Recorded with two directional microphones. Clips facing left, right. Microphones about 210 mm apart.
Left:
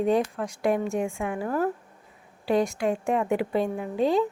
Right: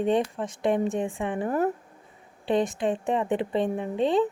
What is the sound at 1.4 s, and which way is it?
Speech, 20° right (ahead or behind).